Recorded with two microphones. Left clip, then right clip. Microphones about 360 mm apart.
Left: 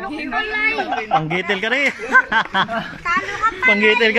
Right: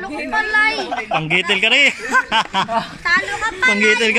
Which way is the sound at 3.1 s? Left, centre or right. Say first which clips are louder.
Right 1 dB; right.